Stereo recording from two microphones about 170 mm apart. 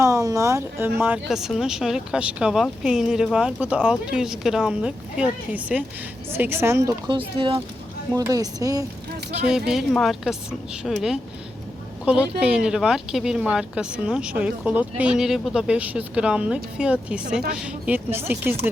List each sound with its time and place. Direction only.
0.0 s speech: 20° right (ahead or behind)
7.1 s speech: 30° right (ahead or behind)
8.1 s speech: 20° right (ahead or behind)
9.5 s speech: 5° right (ahead or behind)